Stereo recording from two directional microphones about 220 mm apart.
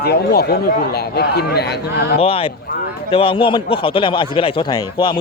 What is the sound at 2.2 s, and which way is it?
Speech, 25° left (ahead or behind).